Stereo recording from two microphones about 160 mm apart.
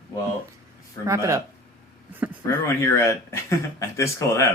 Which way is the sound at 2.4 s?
15° left (ahead or behind).